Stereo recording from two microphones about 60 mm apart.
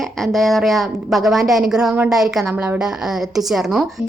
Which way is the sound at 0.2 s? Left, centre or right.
Centre.